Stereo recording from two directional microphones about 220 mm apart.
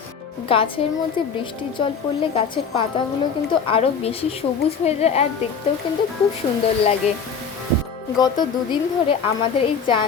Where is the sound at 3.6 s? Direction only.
25° left (ahead or behind).